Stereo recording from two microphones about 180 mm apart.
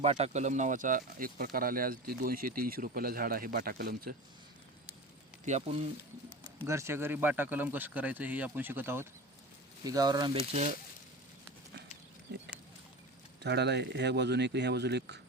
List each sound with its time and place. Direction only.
0.0 s speech: 35° right (ahead or behind); by 4.1 s 55° right (ahead or behind)
5.5 s speech: 35° right (ahead or behind)
6.7 s speech: 15° right (ahead or behind)
10.5 s speech: 40° right (ahead or behind)
13.4 s speech: 70° right (ahead or behind)